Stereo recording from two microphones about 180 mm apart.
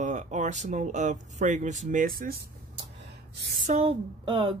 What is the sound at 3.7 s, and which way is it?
Speech, 35° right (ahead or behind).